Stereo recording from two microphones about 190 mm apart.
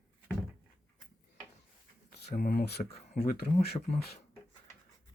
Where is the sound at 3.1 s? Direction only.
40° left (ahead or behind).